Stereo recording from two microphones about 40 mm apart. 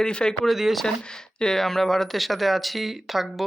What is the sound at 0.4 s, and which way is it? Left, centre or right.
Speech, centre.